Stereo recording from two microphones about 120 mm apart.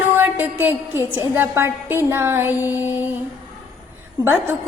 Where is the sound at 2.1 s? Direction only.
20° right (ahead or behind).